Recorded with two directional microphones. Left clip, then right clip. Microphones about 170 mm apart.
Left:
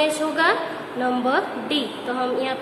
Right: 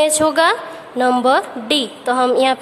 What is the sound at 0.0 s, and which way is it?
A woman's voice, 65° right (ahead or behind).